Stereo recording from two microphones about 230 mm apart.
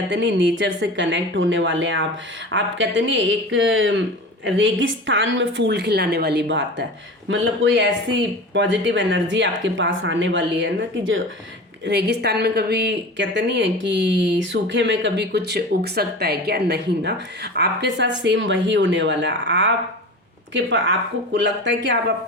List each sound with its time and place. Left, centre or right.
0.1 s a woman's voice: right